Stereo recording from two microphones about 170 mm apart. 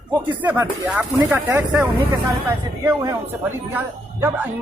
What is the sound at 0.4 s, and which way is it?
A man's voice, 10° right (ahead or behind).